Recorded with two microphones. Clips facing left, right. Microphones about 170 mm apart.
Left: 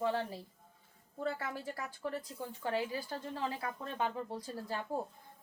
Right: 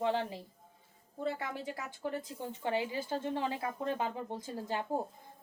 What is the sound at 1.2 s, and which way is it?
Speech, 20° right (ahead or behind).